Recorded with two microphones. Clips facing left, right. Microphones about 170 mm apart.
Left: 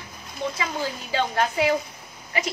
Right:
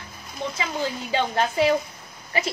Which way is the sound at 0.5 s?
25° right (ahead or behind).